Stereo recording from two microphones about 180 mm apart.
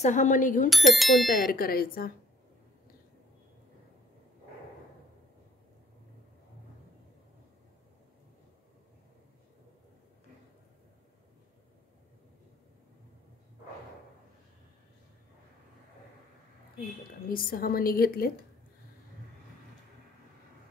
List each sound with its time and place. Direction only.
0.0 s speech: 45° left (ahead or behind)
0.7 s speech: centre (ahead or behind)
1.3 s a woman's voice: 50° left (ahead or behind)
17.3 s a woman's voice: 55° left (ahead or behind)